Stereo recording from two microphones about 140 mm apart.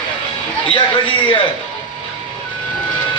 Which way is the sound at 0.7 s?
40° left (ahead or behind).